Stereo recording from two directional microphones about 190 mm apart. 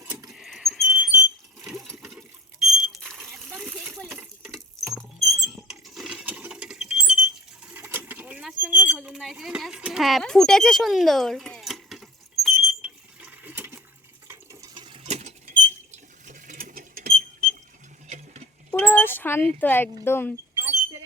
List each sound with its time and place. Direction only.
0.0 s rodents: 10° right (ahead or behind)
0.3 s rodents: centre (ahead or behind)
1.6 s engine: centre (ahead or behind)
2.0 s liquid: 5° right (ahead or behind)
3.1 s water: 5° left (ahead or behind)
5.4 s a sound: centre (ahead or behind)
14.3 s rodents: 20° right (ahead or behind); by 17.6 s 50° right (ahead or behind)
18.7 s a sound: 10° left (ahead or behind)
19.5 s speech: 10° left (ahead or behind)
20.6 s a sound: 15° right (ahead or behind)